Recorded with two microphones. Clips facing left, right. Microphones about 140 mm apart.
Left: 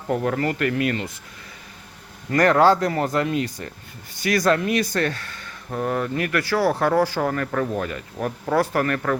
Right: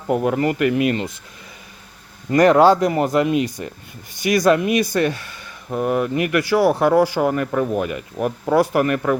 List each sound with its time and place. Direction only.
0.1 s speech: 15° right (ahead or behind)
2.3 s speech: 20° right (ahead or behind)